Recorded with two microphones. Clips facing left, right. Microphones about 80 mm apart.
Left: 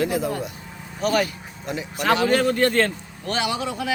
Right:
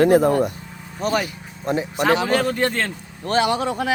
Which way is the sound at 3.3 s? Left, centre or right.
Right.